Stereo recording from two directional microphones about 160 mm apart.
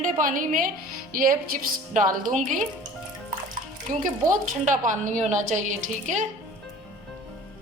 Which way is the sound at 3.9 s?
60° right (ahead or behind).